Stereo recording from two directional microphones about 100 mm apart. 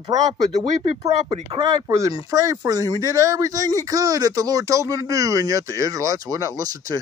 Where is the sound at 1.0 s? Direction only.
85° right.